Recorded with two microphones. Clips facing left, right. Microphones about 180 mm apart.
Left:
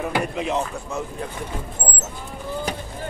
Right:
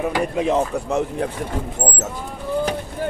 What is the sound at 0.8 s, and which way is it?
Speech, 70° right (ahead or behind).